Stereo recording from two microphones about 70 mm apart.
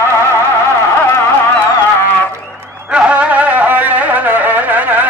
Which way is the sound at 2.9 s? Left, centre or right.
Centre.